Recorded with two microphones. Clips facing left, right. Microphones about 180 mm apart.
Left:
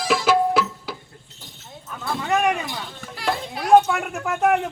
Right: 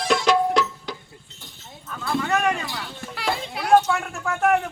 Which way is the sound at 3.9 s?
20° left (ahead or behind).